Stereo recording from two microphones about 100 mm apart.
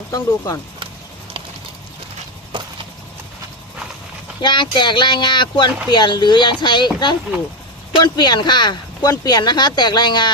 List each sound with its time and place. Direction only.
0.1 s speech: 35° left (ahead or behind)
2.5 s clip-clop: 55° right (ahead or behind)
4.4 s speech: 50° left (ahead or behind)